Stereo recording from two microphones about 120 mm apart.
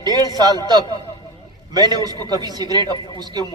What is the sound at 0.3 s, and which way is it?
A man's voice, 35° right (ahead or behind).